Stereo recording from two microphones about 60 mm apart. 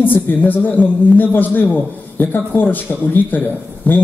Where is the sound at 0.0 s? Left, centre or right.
Left.